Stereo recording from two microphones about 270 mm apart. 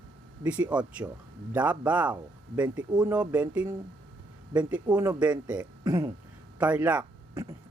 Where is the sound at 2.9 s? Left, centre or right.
Centre.